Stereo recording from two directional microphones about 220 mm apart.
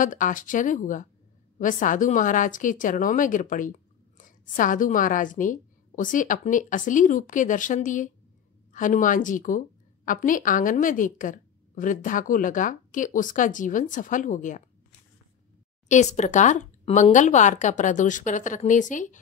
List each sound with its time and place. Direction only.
0.0 s a woman's voice: 35° left (ahead or behind)
15.9 s a woman's voice: 30° left (ahead or behind)